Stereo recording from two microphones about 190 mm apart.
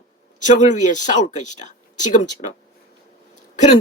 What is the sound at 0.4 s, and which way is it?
Speech, 40° left (ahead or behind).